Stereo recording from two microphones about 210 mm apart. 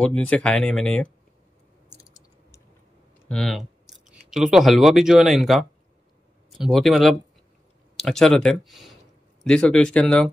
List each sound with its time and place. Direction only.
0.3 s speech: 5° left (ahead or behind)
2.0 s a sound: 15° left (ahead or behind)
3.3 s speech: 5° left (ahead or behind)